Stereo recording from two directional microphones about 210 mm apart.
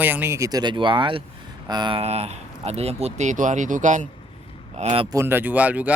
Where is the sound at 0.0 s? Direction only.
10° right (ahead or behind); by 5.0 s 25° right (ahead or behind).